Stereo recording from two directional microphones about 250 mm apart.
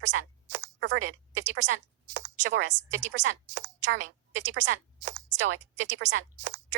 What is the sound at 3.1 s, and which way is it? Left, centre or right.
Speech, right.